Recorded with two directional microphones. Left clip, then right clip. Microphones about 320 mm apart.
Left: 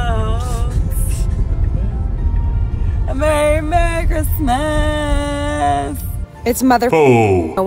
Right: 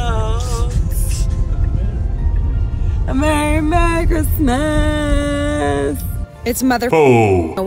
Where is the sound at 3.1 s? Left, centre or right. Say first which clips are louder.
Left 2 dB; centre.